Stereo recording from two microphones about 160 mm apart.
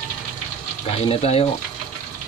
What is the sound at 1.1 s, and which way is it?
Speech, 40° left (ahead or behind).